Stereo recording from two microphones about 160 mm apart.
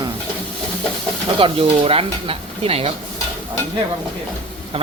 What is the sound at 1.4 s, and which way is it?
Speech, 35° right (ahead or behind).